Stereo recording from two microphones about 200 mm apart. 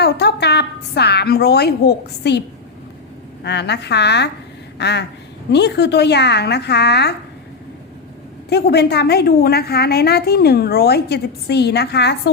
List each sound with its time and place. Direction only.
0.0 s a woman's voice: 55° left (ahead or behind)
3.4 s a woman's voice: 60° left (ahead or behind)
8.4 s a woman's voice: 55° left (ahead or behind)